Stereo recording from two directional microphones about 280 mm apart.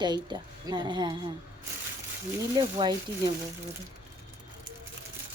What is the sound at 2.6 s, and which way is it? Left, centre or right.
Speech, centre.